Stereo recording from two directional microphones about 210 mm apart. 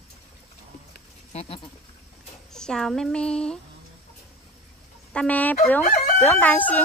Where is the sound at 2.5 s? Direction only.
Centre (ahead or behind).